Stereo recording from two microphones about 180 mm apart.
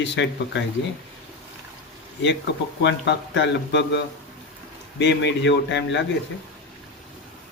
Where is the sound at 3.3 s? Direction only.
80° left.